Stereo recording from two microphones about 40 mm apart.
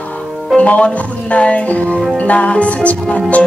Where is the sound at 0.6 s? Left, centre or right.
Left.